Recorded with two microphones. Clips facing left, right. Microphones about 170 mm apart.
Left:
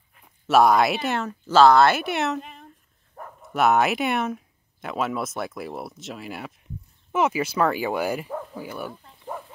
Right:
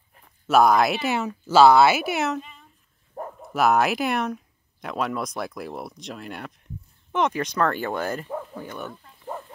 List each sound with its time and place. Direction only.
0.5 s speech: centre (ahead or behind)
2.4 s a sound: 60° left (ahead or behind)
3.2 s dog: 35° right (ahead or behind)
3.5 s speech: centre (ahead or behind)